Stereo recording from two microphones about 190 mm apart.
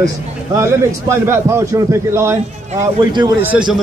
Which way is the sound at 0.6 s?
15° right (ahead or behind).